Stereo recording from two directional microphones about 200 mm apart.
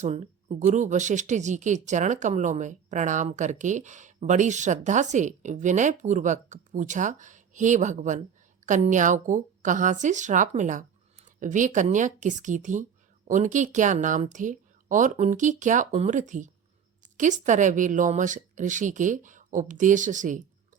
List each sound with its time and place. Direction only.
0.0 s speech: 35° right (ahead or behind)